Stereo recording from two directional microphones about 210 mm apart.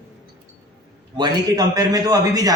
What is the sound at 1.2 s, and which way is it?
A man's voice, 15° right (ahead or behind).